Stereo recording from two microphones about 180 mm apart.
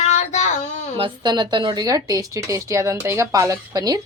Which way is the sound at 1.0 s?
25° right (ahead or behind).